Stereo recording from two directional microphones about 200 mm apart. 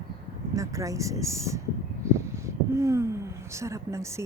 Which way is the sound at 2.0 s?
15° right (ahead or behind).